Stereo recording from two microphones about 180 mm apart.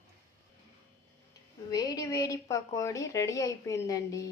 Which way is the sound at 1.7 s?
20° left (ahead or behind).